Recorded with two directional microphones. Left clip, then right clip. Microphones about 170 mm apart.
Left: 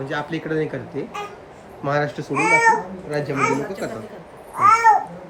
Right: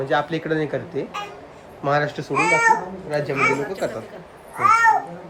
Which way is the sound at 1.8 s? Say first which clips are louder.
Right 1 dB; 10° right (ahead or behind).